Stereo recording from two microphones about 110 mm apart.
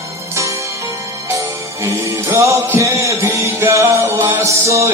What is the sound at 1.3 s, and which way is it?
Music, 25° right (ahead or behind).